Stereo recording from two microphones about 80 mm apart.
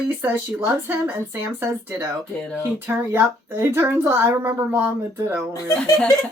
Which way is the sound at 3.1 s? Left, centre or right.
Right.